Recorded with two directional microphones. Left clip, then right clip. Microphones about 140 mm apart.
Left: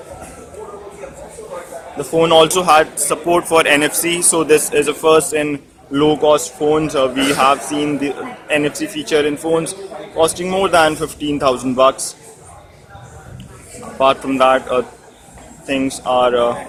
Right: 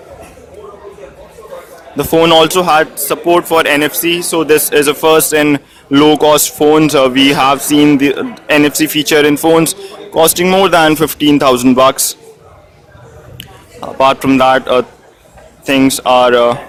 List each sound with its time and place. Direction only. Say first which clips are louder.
2.0 s a man's voice: right 4 dB; 40° right (ahead or behind); by 4.4 s 15° right (ahead or behind)
4.4 s a man's voice: right 5 dB; 30° right (ahead or behind); by 11.9 s 45° right (ahead or behind)
14.0 s a man's voice: right 4 dB; 40° right (ahead or behind)